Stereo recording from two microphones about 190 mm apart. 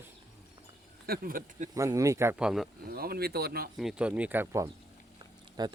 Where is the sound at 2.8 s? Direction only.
55° right (ahead or behind).